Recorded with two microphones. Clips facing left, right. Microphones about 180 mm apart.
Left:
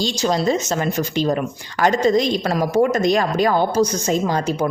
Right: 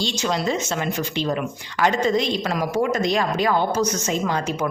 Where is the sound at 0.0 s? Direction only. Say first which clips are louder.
Left 4 dB; 35° left (ahead or behind).